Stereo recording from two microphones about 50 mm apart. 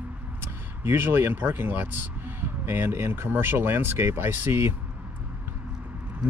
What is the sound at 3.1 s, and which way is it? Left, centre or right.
Speech, right.